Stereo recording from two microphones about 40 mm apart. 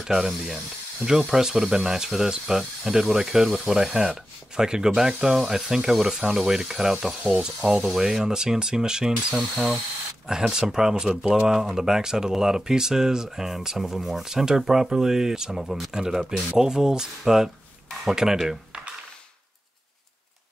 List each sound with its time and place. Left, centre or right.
0.0 s spray: centre
1.0 s speech: centre